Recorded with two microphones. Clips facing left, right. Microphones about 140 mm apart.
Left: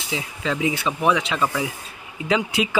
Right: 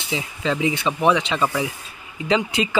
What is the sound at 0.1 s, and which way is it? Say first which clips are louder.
Speech: right 2 dB; centre (ahead or behind).